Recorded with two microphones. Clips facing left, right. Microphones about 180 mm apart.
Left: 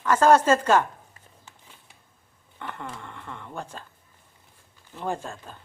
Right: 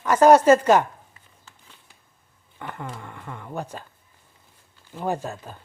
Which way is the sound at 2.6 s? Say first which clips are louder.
Right 2 dB; 10° right (ahead or behind).